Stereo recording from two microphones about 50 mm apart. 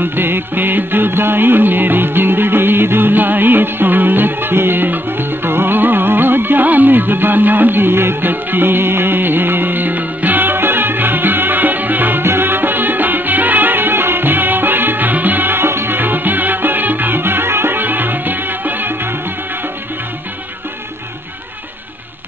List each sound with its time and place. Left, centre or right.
0.0 s music: right